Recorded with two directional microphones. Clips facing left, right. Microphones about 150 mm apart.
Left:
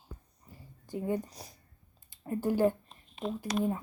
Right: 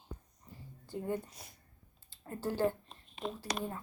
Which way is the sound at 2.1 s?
15° left (ahead or behind).